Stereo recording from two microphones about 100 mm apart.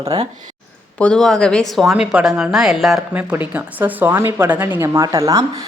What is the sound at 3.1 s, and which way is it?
A woman's voice, 15° right (ahead or behind).